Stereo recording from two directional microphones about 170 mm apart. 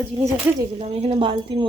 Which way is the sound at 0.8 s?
35° right (ahead or behind).